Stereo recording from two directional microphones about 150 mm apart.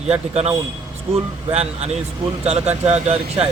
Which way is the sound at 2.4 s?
40° right (ahead or behind).